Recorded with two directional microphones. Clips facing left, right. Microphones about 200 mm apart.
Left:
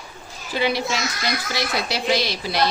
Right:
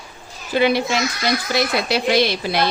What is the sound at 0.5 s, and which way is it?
Speech, 55° right (ahead or behind).